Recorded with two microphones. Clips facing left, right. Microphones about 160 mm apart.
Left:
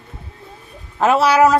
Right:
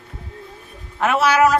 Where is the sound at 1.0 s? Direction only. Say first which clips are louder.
Left 3 dB; 35° left (ahead or behind).